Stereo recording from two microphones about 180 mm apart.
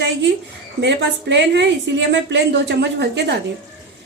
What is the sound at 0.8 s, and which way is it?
A woman's voice, 75° right (ahead or behind).